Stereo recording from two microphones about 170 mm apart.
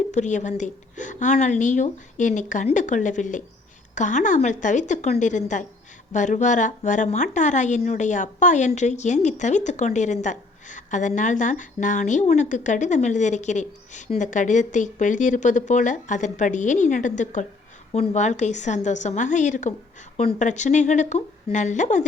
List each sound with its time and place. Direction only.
0.1 s a woman's voice: 45° left (ahead or behind)